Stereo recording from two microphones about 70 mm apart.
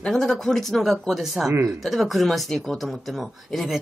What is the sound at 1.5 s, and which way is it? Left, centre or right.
Speech, right.